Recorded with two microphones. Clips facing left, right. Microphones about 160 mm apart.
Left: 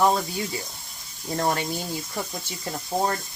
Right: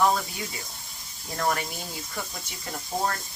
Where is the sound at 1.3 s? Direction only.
30° left (ahead or behind).